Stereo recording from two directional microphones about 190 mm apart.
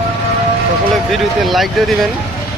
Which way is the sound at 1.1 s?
Centre (ahead or behind).